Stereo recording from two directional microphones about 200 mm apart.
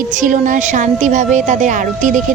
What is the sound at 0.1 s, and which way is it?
A woman's voice, 40° right (ahead or behind).